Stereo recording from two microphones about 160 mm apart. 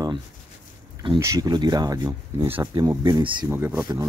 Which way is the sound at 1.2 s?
20° right (ahead or behind).